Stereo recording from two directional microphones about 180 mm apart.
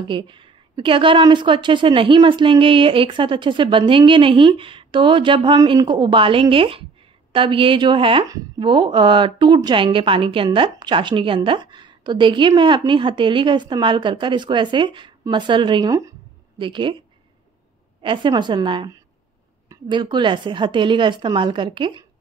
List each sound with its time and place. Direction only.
0.1 s a woman's voice: 25° right (ahead or behind)
18.0 s a woman's voice: 25° right (ahead or behind)